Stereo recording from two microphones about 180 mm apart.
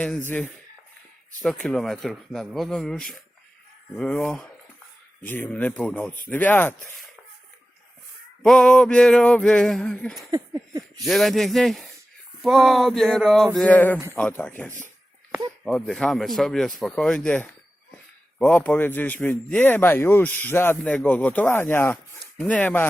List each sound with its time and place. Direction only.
0.0 s speech: 10° left (ahead or behind)
8.4 s speech: 5° left (ahead or behind)
10.3 s a sound: 20° right (ahead or behind)
11.0 s speech: centre (ahead or behind)
22.2 s chopping: 5° left (ahead or behind)